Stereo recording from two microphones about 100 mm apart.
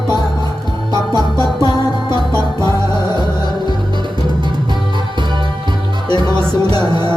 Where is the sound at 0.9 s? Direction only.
45° left (ahead or behind).